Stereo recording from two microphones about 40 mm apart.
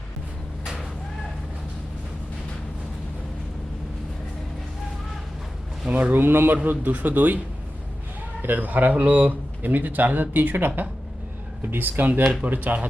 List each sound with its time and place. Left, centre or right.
0.6 s vehicle: centre
5.9 s speech: right
6.1 s speech: right
6.7 s speech: right
8.4 s a man's voice: right
11.7 s speech: right
12.2 s speech: right
12.5 s speech: right